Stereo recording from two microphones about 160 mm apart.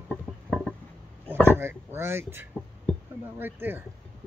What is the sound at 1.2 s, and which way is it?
Speech, 15° right (ahead or behind).